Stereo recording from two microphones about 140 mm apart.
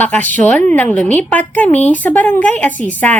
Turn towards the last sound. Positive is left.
turn(degrees=10)  # may be behind; listen again after turning